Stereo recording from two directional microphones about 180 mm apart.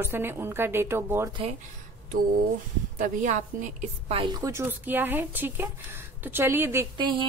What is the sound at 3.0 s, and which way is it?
Speech, 45° right (ahead or behind).